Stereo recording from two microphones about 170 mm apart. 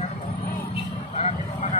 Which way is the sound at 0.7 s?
40° left (ahead or behind).